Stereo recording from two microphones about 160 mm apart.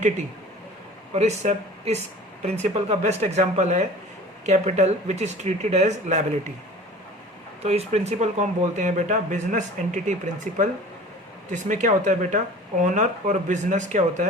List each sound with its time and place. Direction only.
1.1 s speech: 45° right (ahead or behind)
7.6 s speech: 40° right (ahead or behind)